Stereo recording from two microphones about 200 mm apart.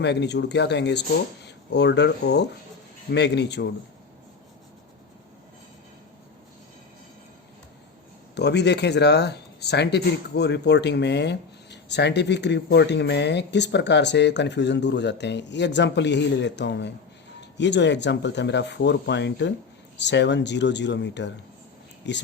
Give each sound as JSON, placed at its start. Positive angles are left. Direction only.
{"t": 0.0, "sound": "speech", "side_deg": 60}
{"t": 8.4, "sound": "speech", "side_deg": 60}